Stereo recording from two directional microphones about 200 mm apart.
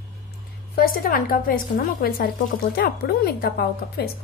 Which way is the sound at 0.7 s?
50° left (ahead or behind).